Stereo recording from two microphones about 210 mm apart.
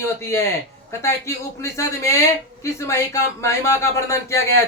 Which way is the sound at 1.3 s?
15° left (ahead or behind).